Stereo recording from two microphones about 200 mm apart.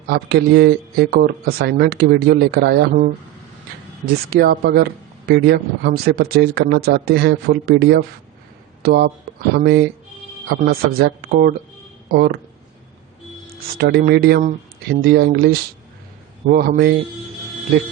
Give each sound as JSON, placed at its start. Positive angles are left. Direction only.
{"t": 0.1, "sound": "speech", "side_deg": -50}
{"t": 4.0, "sound": "speech", "side_deg": -50}
{"t": 13.7, "sound": "speech", "side_deg": -50}